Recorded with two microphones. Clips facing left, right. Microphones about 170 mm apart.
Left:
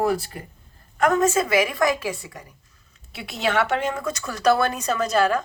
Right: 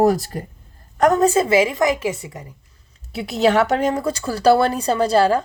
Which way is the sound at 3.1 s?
40° right (ahead or behind).